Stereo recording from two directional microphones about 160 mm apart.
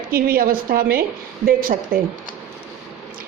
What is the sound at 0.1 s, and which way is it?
A woman's voice, 65° right (ahead or behind).